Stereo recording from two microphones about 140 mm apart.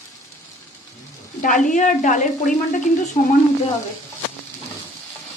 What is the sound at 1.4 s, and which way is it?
Speech, 70° left (ahead or behind).